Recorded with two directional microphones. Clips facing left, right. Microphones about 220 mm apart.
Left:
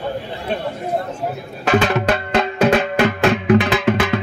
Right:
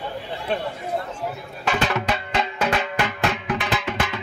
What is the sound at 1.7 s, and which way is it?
Music, 60° left (ahead or behind).